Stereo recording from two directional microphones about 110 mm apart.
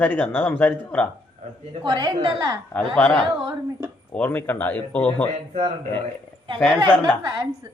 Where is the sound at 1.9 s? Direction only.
35° right (ahead or behind).